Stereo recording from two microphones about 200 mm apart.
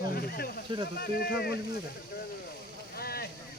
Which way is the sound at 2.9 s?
50° left (ahead or behind).